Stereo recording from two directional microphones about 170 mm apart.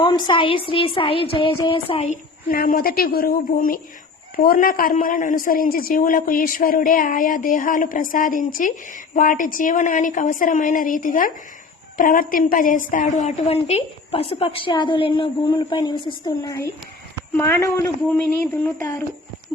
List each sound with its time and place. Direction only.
0.0 s a woman's voice: 25° left (ahead or behind)
2.5 s a woman's voice: 55° left (ahead or behind); by 19.0 s 10° left (ahead or behind)